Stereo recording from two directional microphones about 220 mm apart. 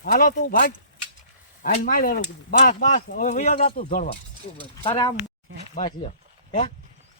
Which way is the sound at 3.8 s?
40° left (ahead or behind).